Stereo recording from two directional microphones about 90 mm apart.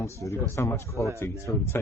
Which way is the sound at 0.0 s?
35° left (ahead or behind).